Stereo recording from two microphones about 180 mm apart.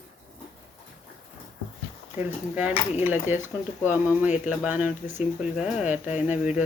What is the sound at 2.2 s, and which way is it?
Speech, 10° right (ahead or behind).